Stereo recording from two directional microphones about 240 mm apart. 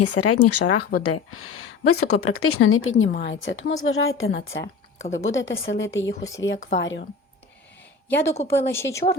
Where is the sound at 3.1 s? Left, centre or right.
Left.